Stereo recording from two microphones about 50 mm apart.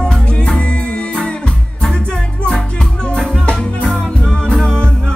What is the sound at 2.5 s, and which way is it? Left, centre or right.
Music, centre.